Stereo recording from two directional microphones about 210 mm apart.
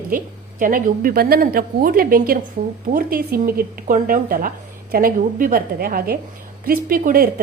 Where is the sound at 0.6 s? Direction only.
40° right (ahead or behind).